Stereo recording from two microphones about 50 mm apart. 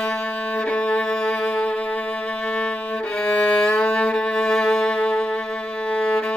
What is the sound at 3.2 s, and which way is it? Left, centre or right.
Music, left.